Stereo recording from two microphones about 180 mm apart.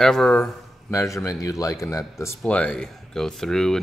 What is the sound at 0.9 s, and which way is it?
Speech, 15° left (ahead or behind).